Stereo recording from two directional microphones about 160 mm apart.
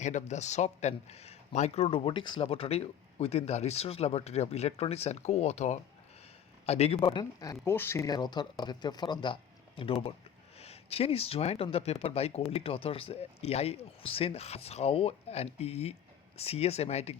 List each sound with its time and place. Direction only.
0.0 s speech: 50° left (ahead or behind)